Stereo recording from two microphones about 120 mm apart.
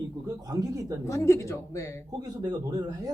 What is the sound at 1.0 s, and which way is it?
Speech, 25° left (ahead or behind).